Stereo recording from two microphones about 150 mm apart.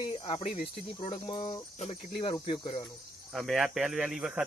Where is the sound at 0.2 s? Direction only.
40° left (ahead or behind).